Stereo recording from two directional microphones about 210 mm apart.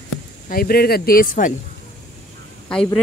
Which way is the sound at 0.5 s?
45° left (ahead or behind).